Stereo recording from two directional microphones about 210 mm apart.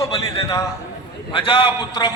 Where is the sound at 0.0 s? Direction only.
15° left (ahead or behind).